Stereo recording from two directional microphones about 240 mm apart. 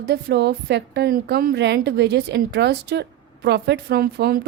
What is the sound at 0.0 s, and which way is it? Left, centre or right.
A woman's voice, right.